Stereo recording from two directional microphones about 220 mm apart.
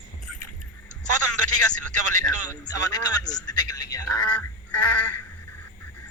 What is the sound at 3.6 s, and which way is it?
Speech, 15° left (ahead or behind).